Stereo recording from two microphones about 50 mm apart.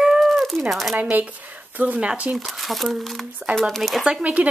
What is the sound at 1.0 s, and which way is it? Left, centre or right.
A woman's voice, right.